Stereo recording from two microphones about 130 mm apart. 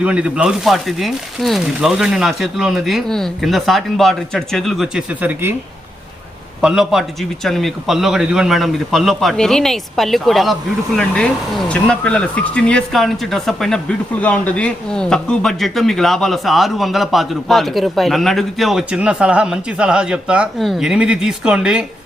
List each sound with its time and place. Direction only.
0.0 s a man's voice: 10° right (ahead or behind)
5.2 s speech: 15° right (ahead or behind)
6.6 s a man's voice: 5° right (ahead or behind)